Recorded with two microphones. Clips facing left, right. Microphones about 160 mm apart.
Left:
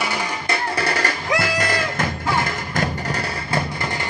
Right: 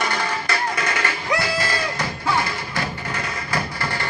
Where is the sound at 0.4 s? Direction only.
30° left (ahead or behind); by 2.8 s 50° left (ahead or behind).